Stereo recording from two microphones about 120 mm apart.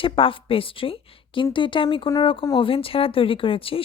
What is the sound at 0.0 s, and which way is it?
Speech, 50° left (ahead or behind).